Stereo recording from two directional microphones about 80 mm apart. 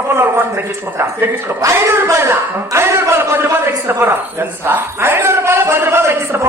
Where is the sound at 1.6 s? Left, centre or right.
Right.